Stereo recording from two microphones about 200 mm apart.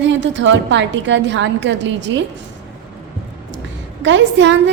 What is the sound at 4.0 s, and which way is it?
Speech, 65° right (ahead or behind).